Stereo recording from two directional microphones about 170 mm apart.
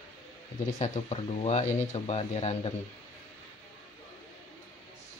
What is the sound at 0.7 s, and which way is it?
Speech, 40° left (ahead or behind).